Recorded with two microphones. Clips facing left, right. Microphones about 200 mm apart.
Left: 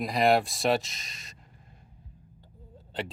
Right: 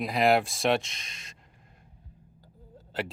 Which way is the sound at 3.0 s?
Centre (ahead or behind).